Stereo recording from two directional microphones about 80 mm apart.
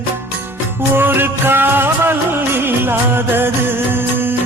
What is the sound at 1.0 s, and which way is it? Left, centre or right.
Music, right.